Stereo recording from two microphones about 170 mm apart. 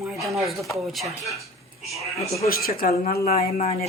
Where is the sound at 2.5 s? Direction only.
60° left (ahead or behind).